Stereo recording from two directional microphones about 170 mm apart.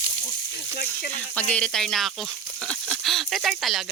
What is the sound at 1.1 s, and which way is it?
Speech, 10° left (ahead or behind).